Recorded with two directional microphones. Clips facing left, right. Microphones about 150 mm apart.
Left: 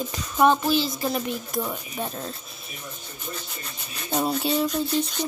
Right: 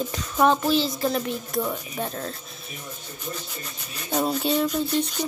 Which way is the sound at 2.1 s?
20° left (ahead or behind).